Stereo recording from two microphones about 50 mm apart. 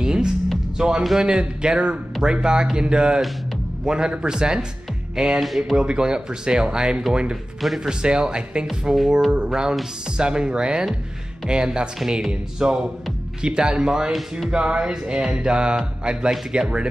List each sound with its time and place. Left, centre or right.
0.0 s music: centre
0.7 s speech: centre
5.1 s music: centre
5.8 s speech: centre
7.9 s speech: centre
14.5 s music: centre